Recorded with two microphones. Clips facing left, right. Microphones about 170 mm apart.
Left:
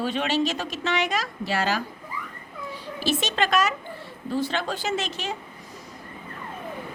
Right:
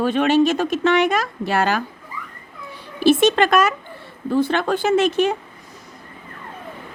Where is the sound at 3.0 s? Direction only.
55° right (ahead or behind).